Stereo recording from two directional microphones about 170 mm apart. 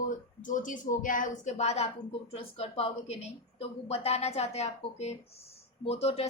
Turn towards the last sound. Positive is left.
turn(degrees=35)  # may be behind; listen again after turning